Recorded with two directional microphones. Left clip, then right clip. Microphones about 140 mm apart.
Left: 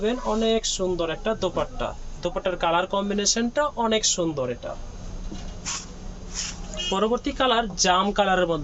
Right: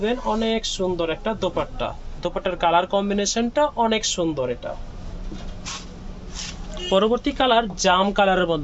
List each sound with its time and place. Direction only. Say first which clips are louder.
0.0 s speech: right 1 dB; 35° right (ahead or behind)
6.9 s speech: right 5 dB; 55° right (ahead or behind)